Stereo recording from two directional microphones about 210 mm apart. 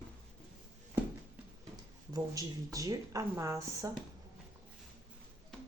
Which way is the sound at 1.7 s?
15° right (ahead or behind).